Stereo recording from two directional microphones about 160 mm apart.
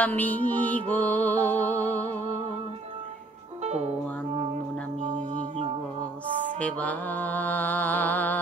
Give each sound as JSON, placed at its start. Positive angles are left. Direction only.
{"t": 0.0, "sound": "music", "side_deg": 10}
{"t": 3.6, "sound": "music", "side_deg": -40}
{"t": 5.0, "sound": "music", "side_deg": -50}
{"t": 6.6, "sound": "mantra", "side_deg": 10}